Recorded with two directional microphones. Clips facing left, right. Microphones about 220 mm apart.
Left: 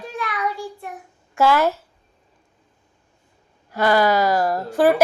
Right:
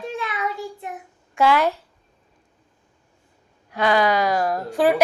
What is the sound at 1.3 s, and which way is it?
Speech, 5° left (ahead or behind).